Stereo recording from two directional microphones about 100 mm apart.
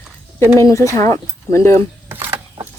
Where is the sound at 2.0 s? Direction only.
25° right (ahead or behind).